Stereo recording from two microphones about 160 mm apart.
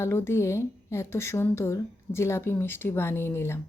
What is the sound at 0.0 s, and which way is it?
Speech, 15° left (ahead or behind).